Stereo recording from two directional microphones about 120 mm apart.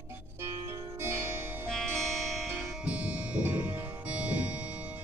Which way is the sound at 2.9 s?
10° right (ahead or behind).